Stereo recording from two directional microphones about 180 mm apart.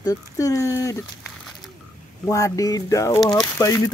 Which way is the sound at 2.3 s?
20° left (ahead or behind).